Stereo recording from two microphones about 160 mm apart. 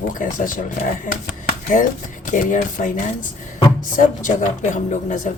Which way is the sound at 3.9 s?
55° left (ahead or behind).